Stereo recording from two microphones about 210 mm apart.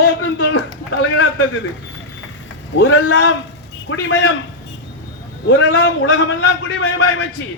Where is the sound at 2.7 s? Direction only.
60° left (ahead or behind).